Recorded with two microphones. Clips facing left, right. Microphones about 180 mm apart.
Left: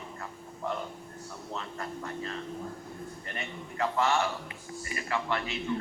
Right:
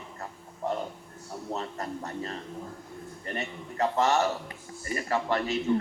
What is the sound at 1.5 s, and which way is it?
Speech, 40° right (ahead or behind).